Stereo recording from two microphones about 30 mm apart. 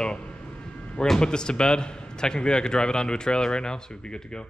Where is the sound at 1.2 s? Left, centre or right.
Left.